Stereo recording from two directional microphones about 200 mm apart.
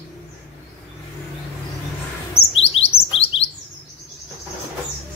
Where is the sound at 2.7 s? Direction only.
30° left (ahead or behind).